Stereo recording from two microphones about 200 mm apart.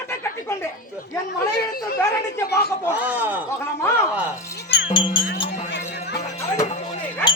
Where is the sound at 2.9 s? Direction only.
10° right (ahead or behind).